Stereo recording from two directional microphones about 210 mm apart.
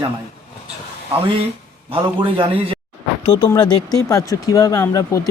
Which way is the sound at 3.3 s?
20° left (ahead or behind).